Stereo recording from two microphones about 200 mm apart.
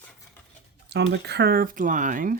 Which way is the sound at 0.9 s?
55° right (ahead or behind).